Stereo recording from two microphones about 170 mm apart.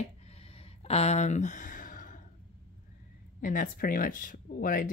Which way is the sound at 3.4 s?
55° left (ahead or behind).